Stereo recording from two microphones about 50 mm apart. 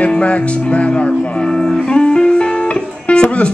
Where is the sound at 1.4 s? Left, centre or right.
Centre.